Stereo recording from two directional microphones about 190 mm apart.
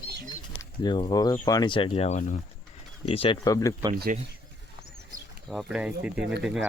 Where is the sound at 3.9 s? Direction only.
50° right (ahead or behind).